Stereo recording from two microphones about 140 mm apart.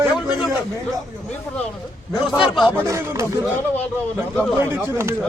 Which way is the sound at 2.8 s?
20° right (ahead or behind).